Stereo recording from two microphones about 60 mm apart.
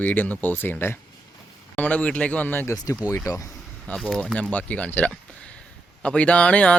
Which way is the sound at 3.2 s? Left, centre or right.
Left.